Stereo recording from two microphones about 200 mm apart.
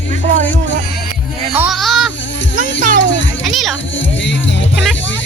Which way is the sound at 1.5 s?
5° right (ahead or behind).